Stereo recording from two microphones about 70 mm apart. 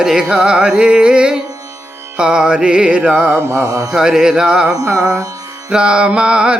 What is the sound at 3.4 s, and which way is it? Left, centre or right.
Mantra, right.